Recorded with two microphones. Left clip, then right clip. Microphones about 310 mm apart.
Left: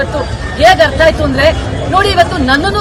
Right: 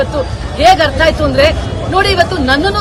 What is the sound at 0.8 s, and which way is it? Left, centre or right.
Speech, centre.